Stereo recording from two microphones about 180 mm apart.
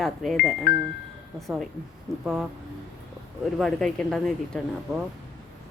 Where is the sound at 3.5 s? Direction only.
Centre (ahead or behind).